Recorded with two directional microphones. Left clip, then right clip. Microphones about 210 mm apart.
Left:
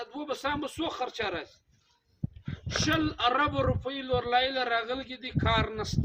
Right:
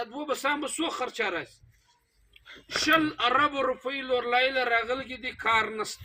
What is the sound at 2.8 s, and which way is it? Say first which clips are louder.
Speech: right 4 dB; 15° left (ahead or behind).